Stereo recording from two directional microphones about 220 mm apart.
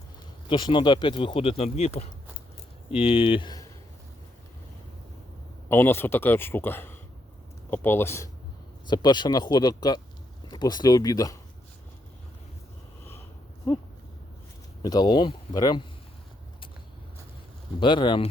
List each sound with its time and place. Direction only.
0.4 s speech: 20° left (ahead or behind)
5.6 s a man's voice: 10° left (ahead or behind)
14.8 s speech: 20° left (ahead or behind)
17.7 s speech: 20° left (ahead or behind)